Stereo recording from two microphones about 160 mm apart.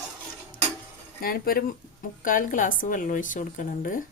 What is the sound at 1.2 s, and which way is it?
Speech, 70° left (ahead or behind).